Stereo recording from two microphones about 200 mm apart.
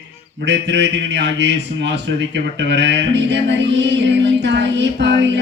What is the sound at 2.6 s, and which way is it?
Music, 60° right (ahead or behind).